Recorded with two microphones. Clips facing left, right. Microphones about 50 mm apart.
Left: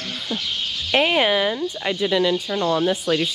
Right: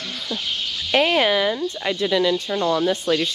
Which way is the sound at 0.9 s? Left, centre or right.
Centre.